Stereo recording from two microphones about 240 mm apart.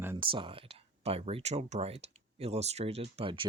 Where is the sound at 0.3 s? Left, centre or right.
Right.